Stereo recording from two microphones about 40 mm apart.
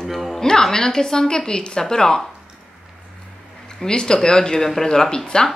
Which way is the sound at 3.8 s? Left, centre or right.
Centre.